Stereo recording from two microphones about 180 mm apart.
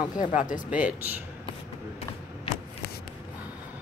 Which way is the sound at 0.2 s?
45° left (ahead or behind).